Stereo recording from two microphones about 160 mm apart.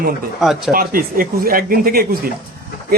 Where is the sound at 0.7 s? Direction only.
65° right (ahead or behind).